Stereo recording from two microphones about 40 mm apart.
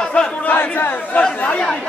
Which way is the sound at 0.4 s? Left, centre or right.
Left.